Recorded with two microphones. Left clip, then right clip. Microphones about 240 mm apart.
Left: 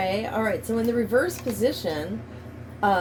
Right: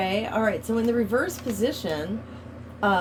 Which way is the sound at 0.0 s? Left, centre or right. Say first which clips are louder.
Even; right.